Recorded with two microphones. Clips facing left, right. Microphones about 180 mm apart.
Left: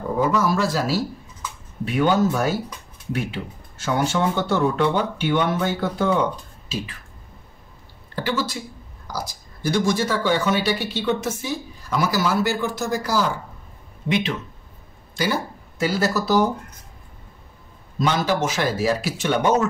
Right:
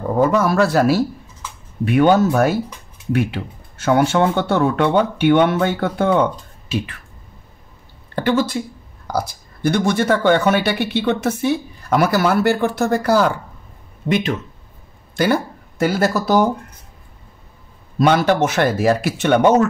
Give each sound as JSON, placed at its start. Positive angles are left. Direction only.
{"t": 0.2, "sound": "speech", "side_deg": -55}
{"t": 8.2, "sound": "speech", "side_deg": -55}
{"t": 17.9, "sound": "speech", "side_deg": -60}